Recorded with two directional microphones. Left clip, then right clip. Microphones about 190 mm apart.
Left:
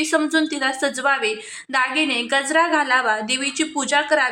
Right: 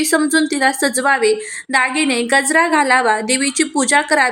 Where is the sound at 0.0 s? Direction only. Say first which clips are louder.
Right 4 dB; 20° right (ahead or behind).